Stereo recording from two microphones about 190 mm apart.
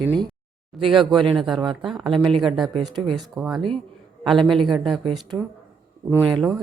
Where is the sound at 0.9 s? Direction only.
25° right (ahead or behind).